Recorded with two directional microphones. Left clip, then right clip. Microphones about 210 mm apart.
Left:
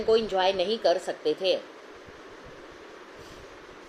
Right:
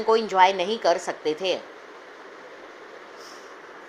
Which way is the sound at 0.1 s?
15° right (ahead or behind).